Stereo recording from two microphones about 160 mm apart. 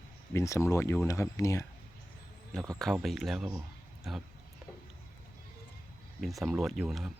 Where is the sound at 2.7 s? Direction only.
Centre (ahead or behind).